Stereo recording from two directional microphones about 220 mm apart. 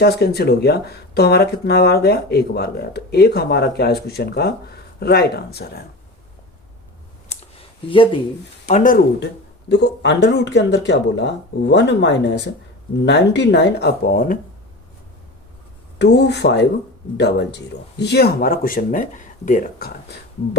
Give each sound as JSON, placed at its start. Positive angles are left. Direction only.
{"t": 0.0, "sound": "speech", "side_deg": 45}
{"t": 7.9, "sound": "speech", "side_deg": 25}
{"t": 8.6, "sound": "speech", "side_deg": 35}
{"t": 16.0, "sound": "speech", "side_deg": 50}